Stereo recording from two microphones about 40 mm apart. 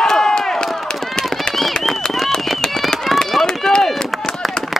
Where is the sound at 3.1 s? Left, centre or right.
Centre.